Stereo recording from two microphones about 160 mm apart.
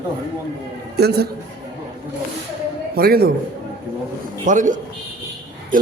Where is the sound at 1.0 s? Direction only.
90° right.